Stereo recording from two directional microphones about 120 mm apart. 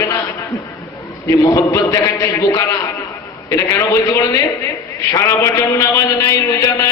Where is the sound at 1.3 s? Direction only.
25° left (ahead or behind).